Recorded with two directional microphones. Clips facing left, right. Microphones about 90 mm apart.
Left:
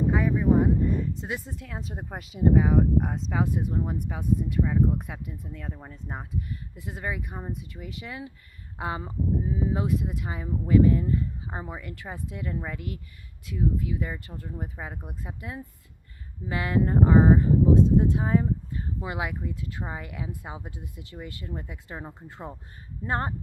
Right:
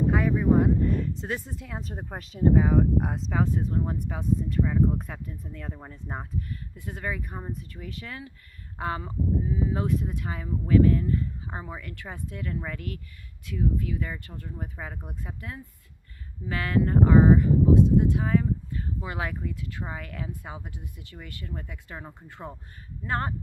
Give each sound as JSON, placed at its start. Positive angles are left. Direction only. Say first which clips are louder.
{"t": 0.2, "sound": "speech", "louder": "even", "side_deg": 5}
{"t": 3.4, "sound": "speech", "louder": "right 1 dB", "side_deg": 15}
{"t": 6.5, "sound": "speech", "louder": "even", "side_deg": 20}
{"t": 19.0, "sound": "speech", "louder": "left 2 dB", "side_deg": 15}
{"t": 19.5, "sound": "speech", "louder": "left 1 dB", "side_deg": 25}